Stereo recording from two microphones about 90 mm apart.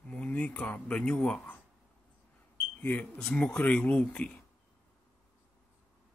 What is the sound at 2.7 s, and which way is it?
Speech, 20° left (ahead or behind).